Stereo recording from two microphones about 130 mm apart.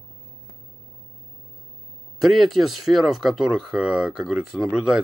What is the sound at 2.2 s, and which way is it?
Speech, centre (ahead or behind).